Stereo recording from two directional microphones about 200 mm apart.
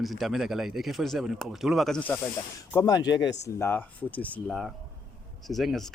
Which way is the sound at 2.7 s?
20° left (ahead or behind).